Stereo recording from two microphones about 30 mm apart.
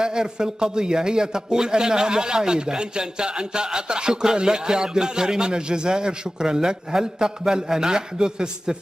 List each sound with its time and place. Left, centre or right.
0.0 s a man's voice: right